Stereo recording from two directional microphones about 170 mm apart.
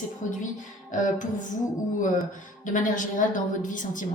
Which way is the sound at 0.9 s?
50° left (ahead or behind).